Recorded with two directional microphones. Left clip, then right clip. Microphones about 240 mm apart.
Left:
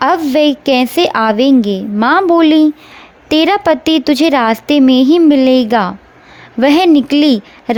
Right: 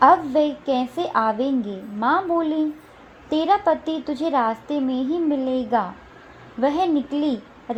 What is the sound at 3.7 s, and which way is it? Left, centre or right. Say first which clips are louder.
A woman's voice: left 11 dB; left.